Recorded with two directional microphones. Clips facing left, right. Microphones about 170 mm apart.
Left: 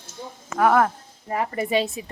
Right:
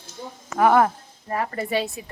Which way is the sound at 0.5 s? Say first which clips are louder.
Right 1 dB; centre (ahead or behind).